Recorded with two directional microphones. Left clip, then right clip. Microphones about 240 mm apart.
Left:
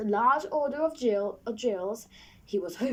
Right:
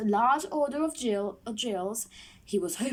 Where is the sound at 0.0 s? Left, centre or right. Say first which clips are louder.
Even; right.